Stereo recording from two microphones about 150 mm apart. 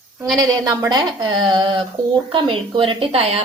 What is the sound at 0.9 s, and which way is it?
A woman's voice, 30° right (ahead or behind).